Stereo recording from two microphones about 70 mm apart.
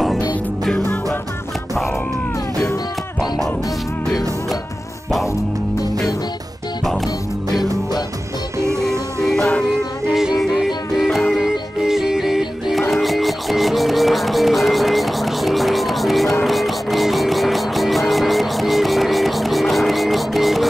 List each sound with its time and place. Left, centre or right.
8.5 s music: right
9.2 s music: centre
9.7 s music: centre